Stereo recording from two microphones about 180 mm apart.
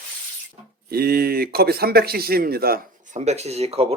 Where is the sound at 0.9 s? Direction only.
60° right (ahead or behind).